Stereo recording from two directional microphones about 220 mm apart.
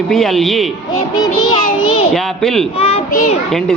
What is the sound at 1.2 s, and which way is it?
Child singing, 20° left (ahead or behind).